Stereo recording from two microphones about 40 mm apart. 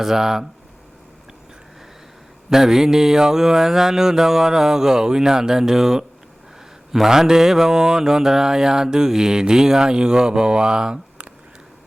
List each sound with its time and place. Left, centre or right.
0.0 s speech: centre
2.5 s speech: centre